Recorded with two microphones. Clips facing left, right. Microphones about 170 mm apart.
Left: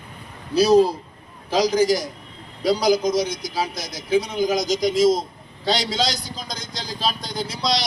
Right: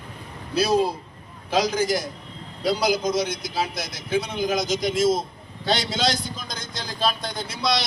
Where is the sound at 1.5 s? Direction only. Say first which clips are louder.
Left 4 dB; 55° right (ahead or behind).